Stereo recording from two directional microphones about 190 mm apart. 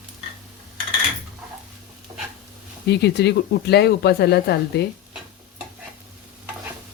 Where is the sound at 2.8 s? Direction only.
65° left (ahead or behind).